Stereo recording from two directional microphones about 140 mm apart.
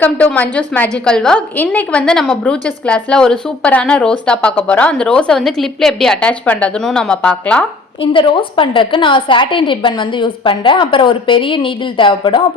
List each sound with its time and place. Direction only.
0.0 s a woman's voice: 10° left (ahead or behind)
8.1 s a woman's voice: 35° left (ahead or behind)